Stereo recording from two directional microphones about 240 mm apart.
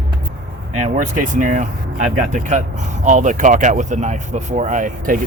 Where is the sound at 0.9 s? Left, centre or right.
Right.